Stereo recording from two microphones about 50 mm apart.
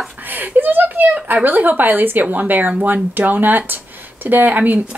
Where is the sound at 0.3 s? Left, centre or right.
Right.